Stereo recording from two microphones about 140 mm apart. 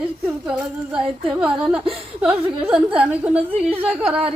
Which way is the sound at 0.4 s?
5° right (ahead or behind).